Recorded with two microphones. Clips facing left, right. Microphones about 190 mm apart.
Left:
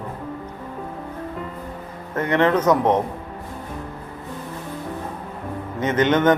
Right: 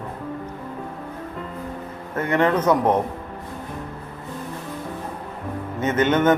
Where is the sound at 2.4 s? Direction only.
10° right (ahead or behind).